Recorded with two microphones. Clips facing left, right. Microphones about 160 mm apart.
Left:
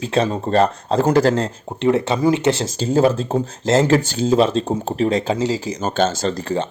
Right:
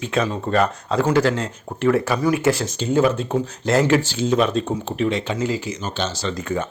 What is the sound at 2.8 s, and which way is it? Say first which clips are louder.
Speech: left 2 dB; 35° left (ahead or behind).